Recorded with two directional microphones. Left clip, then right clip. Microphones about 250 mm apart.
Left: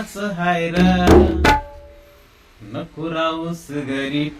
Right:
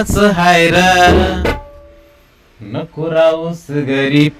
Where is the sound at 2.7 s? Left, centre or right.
Right.